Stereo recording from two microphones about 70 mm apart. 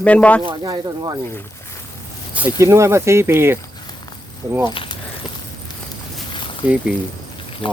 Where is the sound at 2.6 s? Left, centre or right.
Right.